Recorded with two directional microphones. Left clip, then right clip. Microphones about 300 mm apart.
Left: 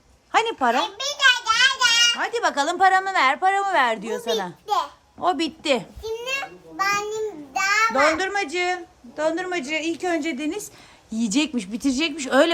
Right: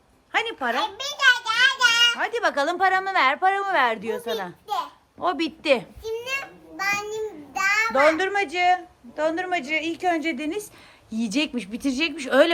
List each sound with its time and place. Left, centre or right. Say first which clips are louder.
0.3 s speech: left 5 dB; centre
0.7 s a child's voice: left 3 dB; centre
4.6 s a sound: left 6 dB; left
5.2 s speech: left 2 dB; centre
6.0 s a sound: left 1 dB; centre
11.1 s speech: left 2 dB; centre